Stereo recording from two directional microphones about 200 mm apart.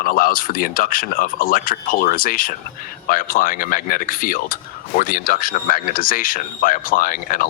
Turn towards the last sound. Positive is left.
turn(degrees=45)  # may be behind; listen again after turning